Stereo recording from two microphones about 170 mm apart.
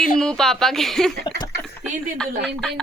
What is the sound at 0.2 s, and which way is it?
A man's voice, 5° left (ahead or behind).